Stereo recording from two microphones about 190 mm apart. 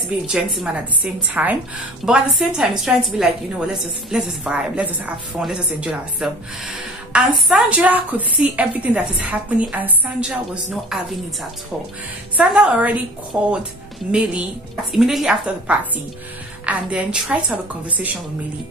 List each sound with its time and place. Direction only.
0.3 s a woman's voice: 5° right (ahead or behind)
12.4 s a woman's voice: 5° right (ahead or behind)